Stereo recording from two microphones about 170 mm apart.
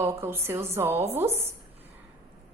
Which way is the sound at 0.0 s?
15° right (ahead or behind).